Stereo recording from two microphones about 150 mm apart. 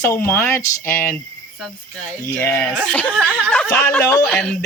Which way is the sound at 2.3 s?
10° left (ahead or behind).